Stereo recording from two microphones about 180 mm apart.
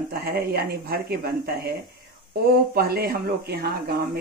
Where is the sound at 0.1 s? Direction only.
55° right (ahead or behind).